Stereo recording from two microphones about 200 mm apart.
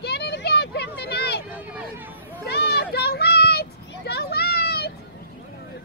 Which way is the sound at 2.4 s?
55° left (ahead or behind).